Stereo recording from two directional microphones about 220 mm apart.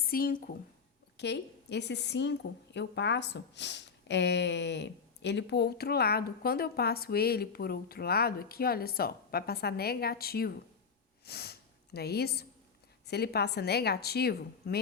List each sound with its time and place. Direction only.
0.0 s a woman's voice: 40° left (ahead or behind)
1.1 s a woman's voice: 50° left (ahead or behind)
11.3 s a sound: 45° left (ahead or behind)
11.9 s a woman's voice: 45° left (ahead or behind)